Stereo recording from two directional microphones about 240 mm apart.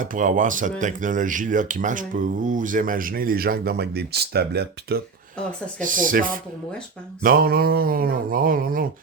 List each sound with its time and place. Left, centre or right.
0.0 s speech: right